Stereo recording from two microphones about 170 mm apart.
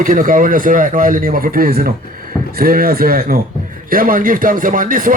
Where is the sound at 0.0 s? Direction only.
55° right (ahead or behind).